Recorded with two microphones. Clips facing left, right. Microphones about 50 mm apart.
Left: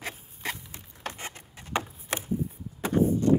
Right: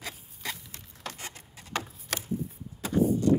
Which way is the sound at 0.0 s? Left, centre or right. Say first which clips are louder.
Left 3 dB; left.